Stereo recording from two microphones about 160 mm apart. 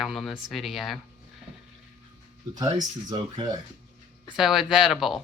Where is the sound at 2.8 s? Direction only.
25° right (ahead or behind).